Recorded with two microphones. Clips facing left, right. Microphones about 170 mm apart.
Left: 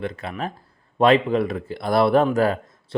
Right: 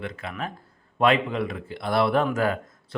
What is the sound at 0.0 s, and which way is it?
Speech, 35° left (ahead or behind).